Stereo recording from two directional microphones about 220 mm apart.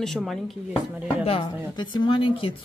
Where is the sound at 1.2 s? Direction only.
25° left (ahead or behind).